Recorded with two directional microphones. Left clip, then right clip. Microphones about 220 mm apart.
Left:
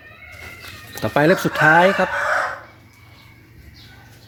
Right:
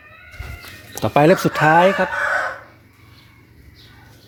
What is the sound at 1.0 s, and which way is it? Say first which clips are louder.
Speech: right 2 dB; 25° right (ahead or behind).